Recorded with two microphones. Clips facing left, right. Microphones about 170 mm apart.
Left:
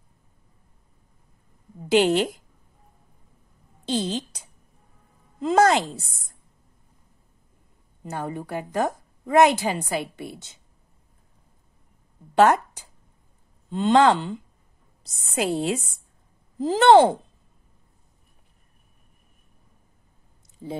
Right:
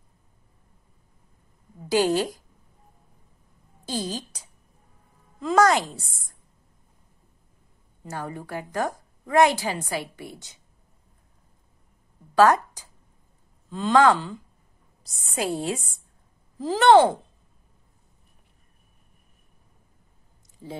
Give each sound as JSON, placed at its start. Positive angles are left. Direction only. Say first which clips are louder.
{"t": 1.9, "sound": "a woman's voice", "louder": "left 3 dB", "side_deg": 20}
{"t": 3.8, "sound": "speech", "louder": "left 4 dB", "side_deg": 25}
{"t": 5.4, "sound": "a woman's voice", "louder": "left 1 dB", "side_deg": 25}
{"t": 8.0, "sound": "a woman's voice", "louder": "left 3 dB", "side_deg": 20}
{"t": 12.4, "sound": "a woman's voice", "louder": "even", "side_deg": 25}